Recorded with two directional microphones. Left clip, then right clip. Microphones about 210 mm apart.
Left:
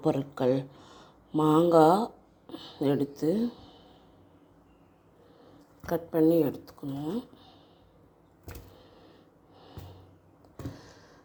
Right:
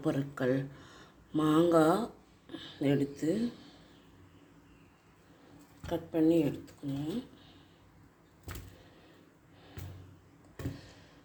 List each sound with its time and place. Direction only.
0.0 s speech: 15° left (ahead or behind)
5.8 s speech: 25° left (ahead or behind)